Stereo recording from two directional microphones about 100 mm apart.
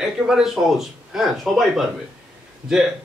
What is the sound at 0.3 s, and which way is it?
Speech, 5° right (ahead or behind).